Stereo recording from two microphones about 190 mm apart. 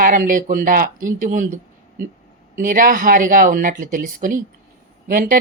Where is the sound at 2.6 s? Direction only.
45° right (ahead or behind).